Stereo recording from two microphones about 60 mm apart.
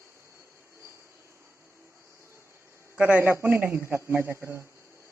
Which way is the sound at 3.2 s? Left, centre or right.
Right.